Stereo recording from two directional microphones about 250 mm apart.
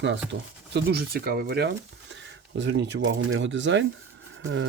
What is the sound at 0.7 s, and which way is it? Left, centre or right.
Speech, right.